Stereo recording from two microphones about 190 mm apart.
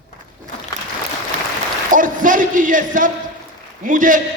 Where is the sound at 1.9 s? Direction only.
45° right (ahead or behind).